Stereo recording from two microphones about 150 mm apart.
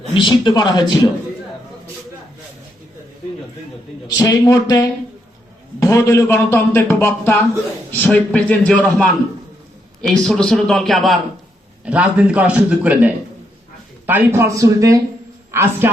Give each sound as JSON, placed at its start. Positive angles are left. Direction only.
{"t": 0.1, "sound": "a man's voice", "side_deg": 30}
{"t": 4.0, "sound": "a man's voice", "side_deg": 25}
{"t": 14.1, "sound": "a man's voice", "side_deg": -15}